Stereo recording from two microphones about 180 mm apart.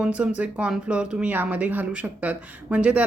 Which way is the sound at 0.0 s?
5° right (ahead or behind).